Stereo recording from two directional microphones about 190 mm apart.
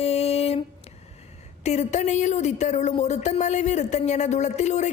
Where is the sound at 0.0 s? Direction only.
35° left (ahead or behind).